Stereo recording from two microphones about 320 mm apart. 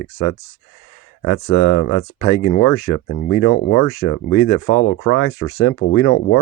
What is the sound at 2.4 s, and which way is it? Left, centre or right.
Speech, left.